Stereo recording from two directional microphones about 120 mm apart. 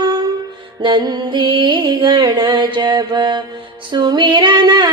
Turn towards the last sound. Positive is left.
turn(degrees=-35)  # may be behind; listen again after turning